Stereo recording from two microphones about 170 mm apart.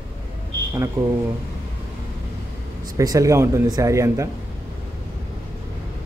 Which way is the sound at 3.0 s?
20° right (ahead or behind).